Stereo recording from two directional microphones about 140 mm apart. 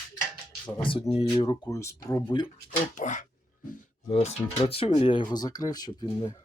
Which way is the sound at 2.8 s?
60° left (ahead or behind).